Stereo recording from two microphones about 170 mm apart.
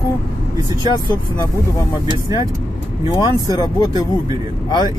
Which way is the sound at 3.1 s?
25° left (ahead or behind).